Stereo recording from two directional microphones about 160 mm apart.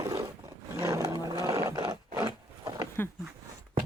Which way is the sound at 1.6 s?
15° right (ahead or behind).